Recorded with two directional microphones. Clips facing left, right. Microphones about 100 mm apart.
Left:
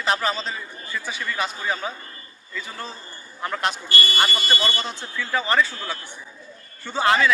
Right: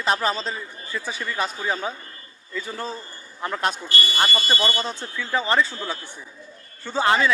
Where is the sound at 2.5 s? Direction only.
30° right (ahead or behind).